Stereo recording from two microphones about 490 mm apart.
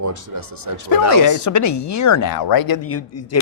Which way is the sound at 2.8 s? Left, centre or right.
Left.